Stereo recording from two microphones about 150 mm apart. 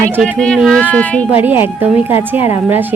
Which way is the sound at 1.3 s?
10° right (ahead or behind).